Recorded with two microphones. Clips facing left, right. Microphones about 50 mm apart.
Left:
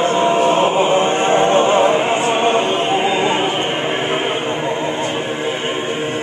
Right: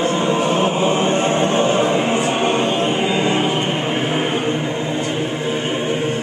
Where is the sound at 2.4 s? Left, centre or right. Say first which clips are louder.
Left 2 dB; left.